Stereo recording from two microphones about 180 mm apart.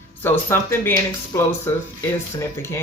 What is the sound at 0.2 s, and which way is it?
Speech, 10° left (ahead or behind).